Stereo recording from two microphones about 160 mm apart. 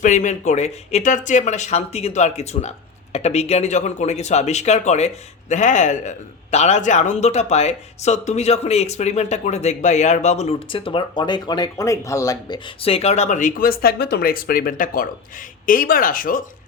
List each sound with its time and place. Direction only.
0.0 s speech: 50° left (ahead or behind)